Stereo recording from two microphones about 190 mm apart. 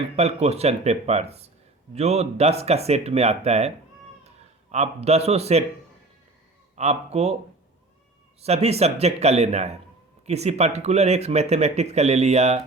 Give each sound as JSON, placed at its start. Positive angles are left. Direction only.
{"t": 0.2, "sound": "speech", "side_deg": -35}
{"t": 4.7, "sound": "speech", "side_deg": -35}
{"t": 6.7, "sound": "speech", "side_deg": -35}
{"t": 8.4, "sound": "speech", "side_deg": -35}